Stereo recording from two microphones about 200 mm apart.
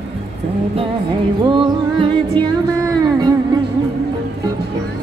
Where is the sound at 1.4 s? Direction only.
25° right (ahead or behind).